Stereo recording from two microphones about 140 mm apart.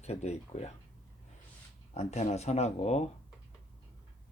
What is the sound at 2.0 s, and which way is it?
Speech, 50° left (ahead or behind).